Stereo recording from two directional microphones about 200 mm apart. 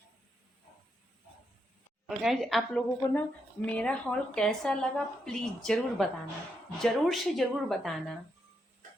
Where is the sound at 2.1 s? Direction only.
Centre (ahead or behind).